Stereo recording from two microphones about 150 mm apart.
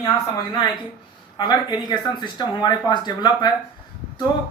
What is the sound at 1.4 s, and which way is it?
Speech, 30° left (ahead or behind).